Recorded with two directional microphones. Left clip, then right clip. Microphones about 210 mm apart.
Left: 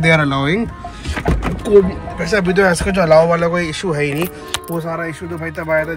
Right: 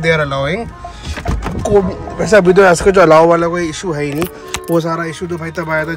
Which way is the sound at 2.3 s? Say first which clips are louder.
Right 7 dB; 35° right (ahead or behind).